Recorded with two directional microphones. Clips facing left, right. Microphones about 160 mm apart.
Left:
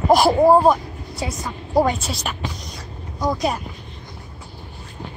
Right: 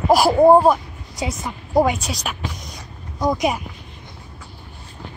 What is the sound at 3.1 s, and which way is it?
Speech, 20° right (ahead or behind).